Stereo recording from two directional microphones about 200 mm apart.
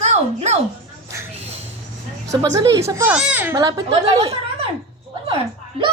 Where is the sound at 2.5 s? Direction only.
15° right (ahead or behind).